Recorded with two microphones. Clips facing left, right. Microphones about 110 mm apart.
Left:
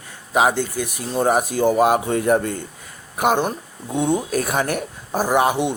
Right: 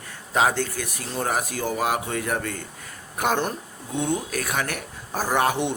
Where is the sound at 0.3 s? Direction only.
15° left (ahead or behind).